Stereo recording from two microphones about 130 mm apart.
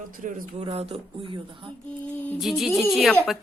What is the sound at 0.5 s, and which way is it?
Speech, 45° right (ahead or behind).